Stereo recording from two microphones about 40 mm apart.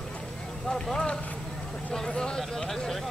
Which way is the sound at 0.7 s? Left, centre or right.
Centre.